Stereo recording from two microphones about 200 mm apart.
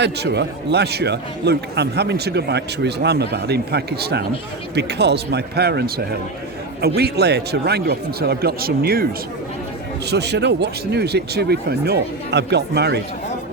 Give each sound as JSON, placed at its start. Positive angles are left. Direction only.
{"t": 0.0, "sound": "a man's voice", "side_deg": -60}
{"t": 10.1, "sound": "a man's voice", "side_deg": -55}